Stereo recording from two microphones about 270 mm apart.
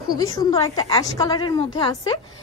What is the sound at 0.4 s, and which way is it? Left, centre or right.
Speech, centre.